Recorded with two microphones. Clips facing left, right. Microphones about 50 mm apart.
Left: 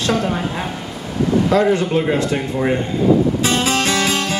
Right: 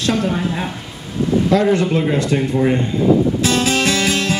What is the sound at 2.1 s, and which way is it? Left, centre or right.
Speech, centre.